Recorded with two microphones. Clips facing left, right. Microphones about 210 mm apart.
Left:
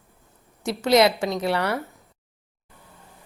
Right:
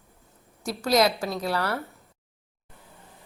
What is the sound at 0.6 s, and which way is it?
Speech, 25° left (ahead or behind).